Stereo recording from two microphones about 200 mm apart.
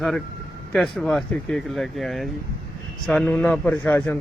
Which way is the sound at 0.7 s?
5° left (ahead or behind).